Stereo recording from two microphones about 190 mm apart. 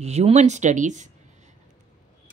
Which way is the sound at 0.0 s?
35° right (ahead or behind).